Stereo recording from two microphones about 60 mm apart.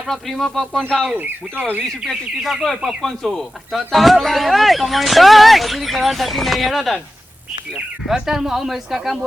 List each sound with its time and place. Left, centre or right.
0.1 s speech: centre
1.1 s speech: right
2.0 s speech: centre